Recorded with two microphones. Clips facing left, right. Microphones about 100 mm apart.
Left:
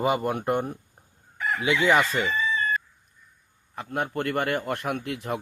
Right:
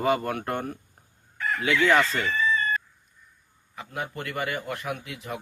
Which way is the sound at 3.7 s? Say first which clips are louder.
Left 5 dB; 50° left (ahead or behind).